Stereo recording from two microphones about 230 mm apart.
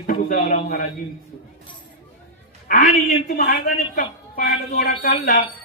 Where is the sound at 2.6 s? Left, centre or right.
Left.